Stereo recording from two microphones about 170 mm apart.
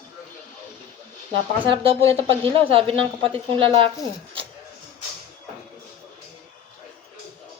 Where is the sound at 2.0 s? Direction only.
15° left (ahead or behind).